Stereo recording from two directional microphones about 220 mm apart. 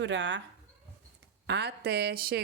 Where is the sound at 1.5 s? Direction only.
50° right (ahead or behind).